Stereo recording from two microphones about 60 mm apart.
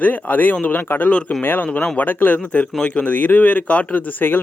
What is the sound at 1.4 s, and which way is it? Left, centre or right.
Speech, left.